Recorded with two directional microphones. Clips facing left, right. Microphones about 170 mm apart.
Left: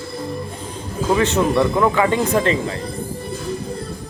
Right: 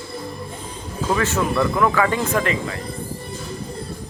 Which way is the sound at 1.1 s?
20° left (ahead or behind).